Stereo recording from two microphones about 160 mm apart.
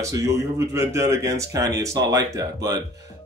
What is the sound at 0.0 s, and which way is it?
Speech, 20° right (ahead or behind).